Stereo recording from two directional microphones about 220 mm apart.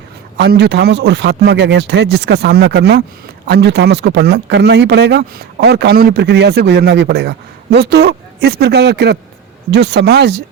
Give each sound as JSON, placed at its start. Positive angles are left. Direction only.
{"t": 0.3, "sound": "a man's voice", "side_deg": -50}